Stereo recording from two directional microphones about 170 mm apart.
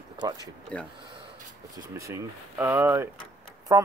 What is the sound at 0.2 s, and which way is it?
Speech, 25° right (ahead or behind).